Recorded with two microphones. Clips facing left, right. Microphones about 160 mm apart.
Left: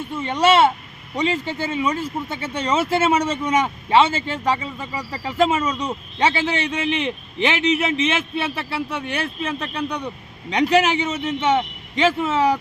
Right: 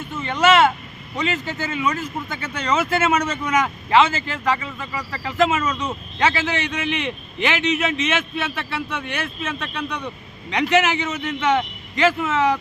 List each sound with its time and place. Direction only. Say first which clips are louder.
0.1 s a man's voice: even; 30° left (ahead or behind)